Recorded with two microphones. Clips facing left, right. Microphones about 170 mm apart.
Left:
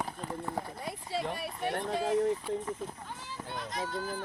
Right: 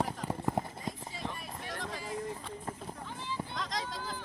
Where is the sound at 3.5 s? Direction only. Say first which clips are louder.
Left 5 dB; 90° right.